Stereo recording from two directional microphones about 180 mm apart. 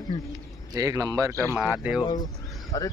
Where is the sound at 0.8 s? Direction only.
20° right (ahead or behind).